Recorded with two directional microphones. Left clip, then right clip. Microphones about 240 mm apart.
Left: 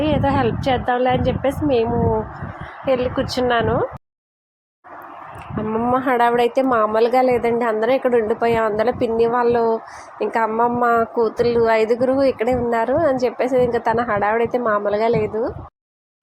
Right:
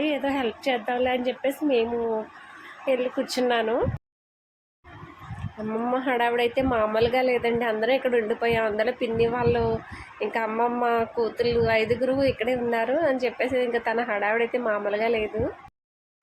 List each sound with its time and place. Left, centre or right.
0.0 s a woman's voice: centre
5.9 s a woman's voice: centre